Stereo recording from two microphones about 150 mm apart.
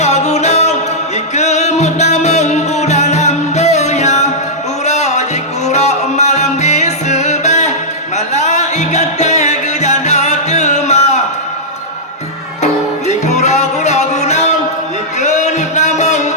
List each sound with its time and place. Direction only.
0.0 s music: 50° left (ahead or behind)
13.1 s music: 50° left (ahead or behind)